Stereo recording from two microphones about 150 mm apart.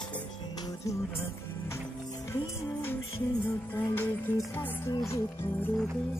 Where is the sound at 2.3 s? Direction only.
15° left (ahead or behind).